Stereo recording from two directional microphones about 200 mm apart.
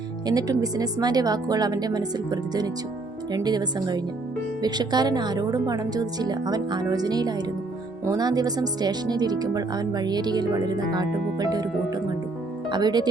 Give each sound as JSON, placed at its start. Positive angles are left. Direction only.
{"t": 0.3, "sound": "speech", "side_deg": -20}